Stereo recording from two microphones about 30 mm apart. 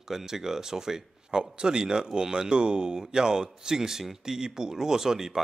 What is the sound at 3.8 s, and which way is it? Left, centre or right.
Speech, centre.